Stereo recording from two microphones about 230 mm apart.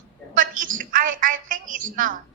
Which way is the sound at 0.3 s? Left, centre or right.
Right.